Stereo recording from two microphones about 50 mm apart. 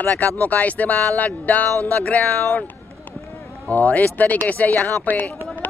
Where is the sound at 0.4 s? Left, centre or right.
Left.